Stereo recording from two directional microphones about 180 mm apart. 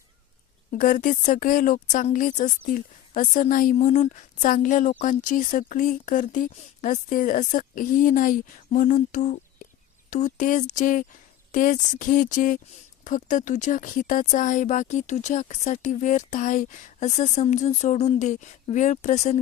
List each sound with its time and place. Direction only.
0.7 s a woman's voice: 50° left (ahead or behind)